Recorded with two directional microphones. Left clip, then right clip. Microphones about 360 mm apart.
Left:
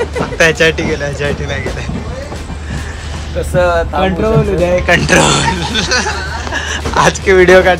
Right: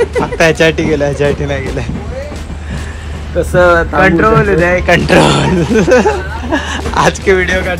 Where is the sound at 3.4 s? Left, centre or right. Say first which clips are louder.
Right 5 dB; right.